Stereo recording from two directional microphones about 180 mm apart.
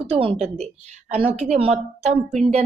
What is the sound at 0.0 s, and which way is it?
A woman's voice, 30° right (ahead or behind).